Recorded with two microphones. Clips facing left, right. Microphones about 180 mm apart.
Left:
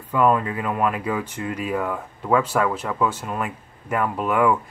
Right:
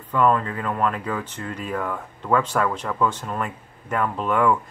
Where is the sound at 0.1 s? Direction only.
10° left (ahead or behind).